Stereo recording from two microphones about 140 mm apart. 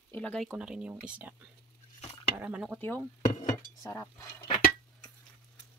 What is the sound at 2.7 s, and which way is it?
Speech, 15° left (ahead or behind).